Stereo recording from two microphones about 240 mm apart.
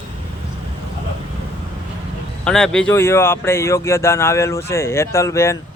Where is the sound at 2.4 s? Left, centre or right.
Centre.